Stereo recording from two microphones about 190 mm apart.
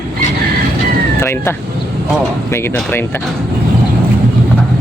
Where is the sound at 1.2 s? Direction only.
15° left (ahead or behind).